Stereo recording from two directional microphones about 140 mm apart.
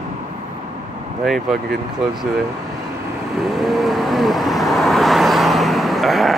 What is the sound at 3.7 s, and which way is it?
Vehicle, centre (ahead or behind).